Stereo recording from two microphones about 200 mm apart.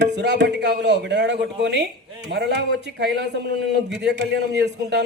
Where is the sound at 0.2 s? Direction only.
60° right (ahead or behind).